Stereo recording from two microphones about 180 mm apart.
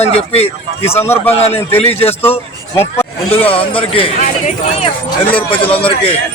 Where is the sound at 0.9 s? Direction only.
15° left (ahead or behind).